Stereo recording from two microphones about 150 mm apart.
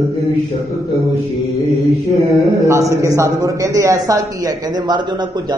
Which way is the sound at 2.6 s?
20° right (ahead or behind).